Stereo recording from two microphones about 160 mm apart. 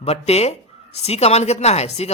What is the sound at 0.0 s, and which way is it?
Speech, 40° left (ahead or behind).